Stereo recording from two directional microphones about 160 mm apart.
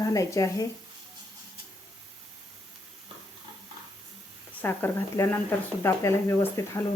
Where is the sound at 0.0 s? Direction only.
20° left (ahead or behind).